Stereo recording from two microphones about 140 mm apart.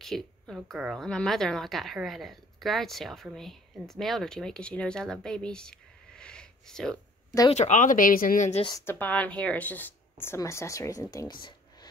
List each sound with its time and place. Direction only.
0.0 s a woman's voice: 5° left (ahead or behind)
7.5 s speech: 55° left (ahead or behind); by 8.5 s 90° left
8.8 s speech: 10° left (ahead or behind)